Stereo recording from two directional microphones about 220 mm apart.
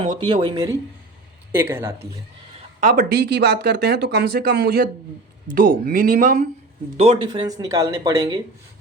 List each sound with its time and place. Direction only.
0.3 s speech: 25° right (ahead or behind)
2.8 s speech: 40° right (ahead or behind); by 8.4 s 15° right (ahead or behind)